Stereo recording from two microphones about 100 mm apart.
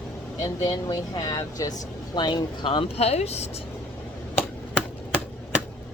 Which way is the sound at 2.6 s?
65° left (ahead or behind).